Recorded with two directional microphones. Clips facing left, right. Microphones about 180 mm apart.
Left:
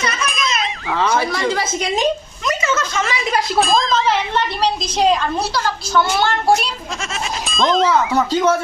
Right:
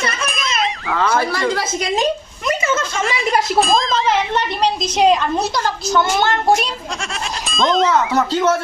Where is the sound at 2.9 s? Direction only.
Centre (ahead or behind).